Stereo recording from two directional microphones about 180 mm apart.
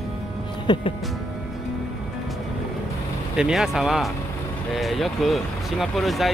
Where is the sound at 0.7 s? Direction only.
25° left (ahead or behind).